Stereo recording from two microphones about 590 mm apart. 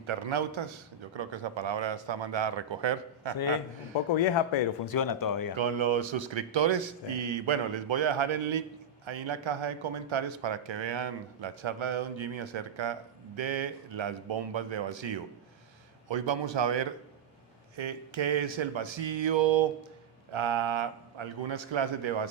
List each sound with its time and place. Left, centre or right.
0.0 s a man's voice: right
4.1 s speech: left
4.9 s speech: left
5.5 s a man's voice: right